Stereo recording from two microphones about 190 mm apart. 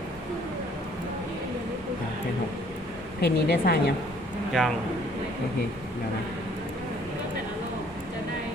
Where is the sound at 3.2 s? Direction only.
55° left (ahead or behind).